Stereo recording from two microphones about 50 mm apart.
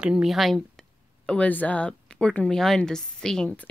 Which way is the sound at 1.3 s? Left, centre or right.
Left.